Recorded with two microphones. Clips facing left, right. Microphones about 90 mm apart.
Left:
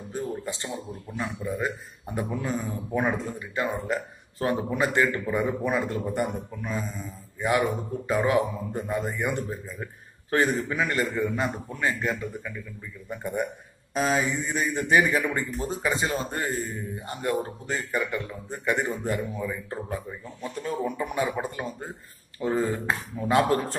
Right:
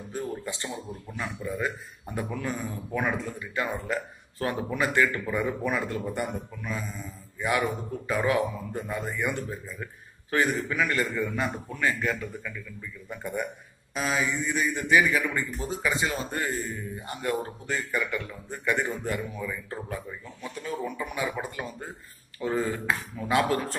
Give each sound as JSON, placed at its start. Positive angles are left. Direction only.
{"t": 0.1, "sound": "a man's voice", "side_deg": 25}
{"t": 13.9, "sound": "a man's voice", "side_deg": 35}
{"t": 20.6, "sound": "speech", "side_deg": 40}